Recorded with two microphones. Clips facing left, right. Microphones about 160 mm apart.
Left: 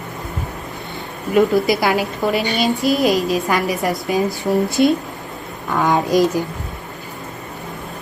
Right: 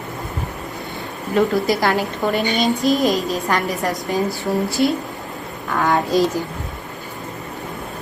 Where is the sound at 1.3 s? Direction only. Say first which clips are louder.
Left 3 dB; 10° left (ahead or behind).